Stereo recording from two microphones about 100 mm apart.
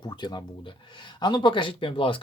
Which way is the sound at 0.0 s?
45° left (ahead or behind).